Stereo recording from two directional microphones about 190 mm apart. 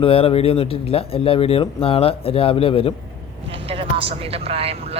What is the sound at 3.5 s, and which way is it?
Speech, 30° right (ahead or behind).